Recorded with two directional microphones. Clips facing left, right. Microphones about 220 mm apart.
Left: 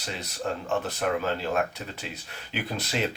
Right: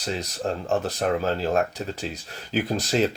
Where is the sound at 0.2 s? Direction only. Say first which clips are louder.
Right 3 dB; 35° right (ahead or behind).